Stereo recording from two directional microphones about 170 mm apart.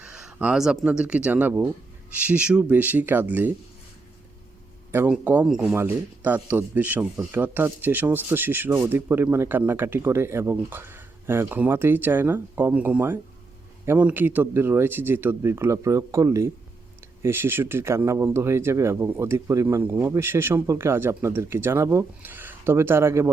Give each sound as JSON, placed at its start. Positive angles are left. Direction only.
{"t": 0.0, "sound": "speech", "side_deg": -5}
{"t": 4.9, "sound": "speech", "side_deg": -10}